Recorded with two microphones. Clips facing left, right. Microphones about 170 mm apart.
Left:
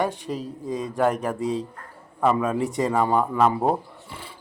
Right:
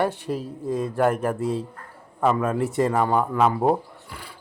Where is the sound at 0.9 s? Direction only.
5° right (ahead or behind).